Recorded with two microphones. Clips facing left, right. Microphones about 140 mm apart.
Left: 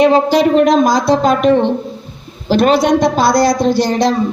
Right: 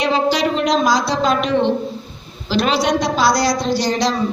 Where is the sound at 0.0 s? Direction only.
50° left (ahead or behind).